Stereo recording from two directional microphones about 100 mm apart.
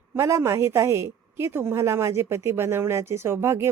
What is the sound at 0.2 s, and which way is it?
A woman's voice, 30° right (ahead or behind).